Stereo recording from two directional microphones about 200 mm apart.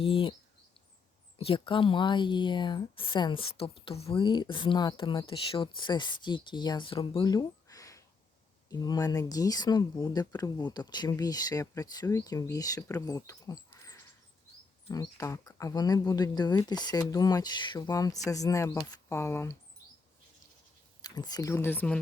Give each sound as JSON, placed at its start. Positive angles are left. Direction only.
{"t": 0.0, "sound": "speech", "side_deg": 25}
{"t": 1.4, "sound": "speech", "side_deg": 25}
{"t": 21.0, "sound": "speech", "side_deg": 20}